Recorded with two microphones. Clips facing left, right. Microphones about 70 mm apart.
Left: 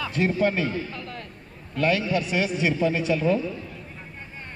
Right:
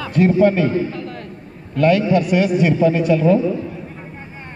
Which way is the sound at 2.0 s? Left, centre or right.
Right.